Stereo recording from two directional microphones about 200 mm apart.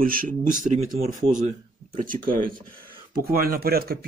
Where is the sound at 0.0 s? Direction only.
45° right (ahead or behind).